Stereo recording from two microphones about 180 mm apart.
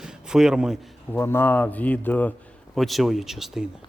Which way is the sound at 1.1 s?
10° left (ahead or behind).